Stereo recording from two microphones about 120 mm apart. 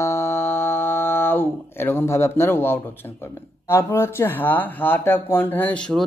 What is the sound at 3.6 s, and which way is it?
Speech, 20° left (ahead or behind).